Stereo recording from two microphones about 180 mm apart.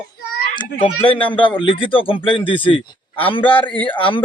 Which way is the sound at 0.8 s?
30° left (ahead or behind).